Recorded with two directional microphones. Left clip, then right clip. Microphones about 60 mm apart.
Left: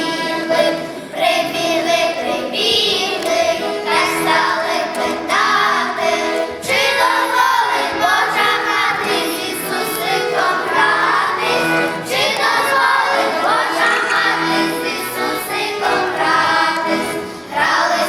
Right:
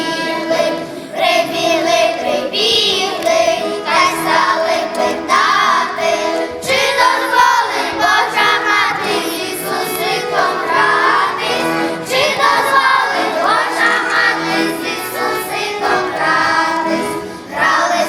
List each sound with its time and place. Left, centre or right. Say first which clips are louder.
1.2 s child singing: right 2 dB; right
3.9 s music: right 3 dB; right
6.7 s music: right 2 dB; right
10.3 s music: right 4 dB; centre
12.4 s child singing: right 3 dB; right